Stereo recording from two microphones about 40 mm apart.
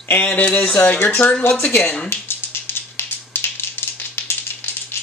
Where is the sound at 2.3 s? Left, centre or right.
Left.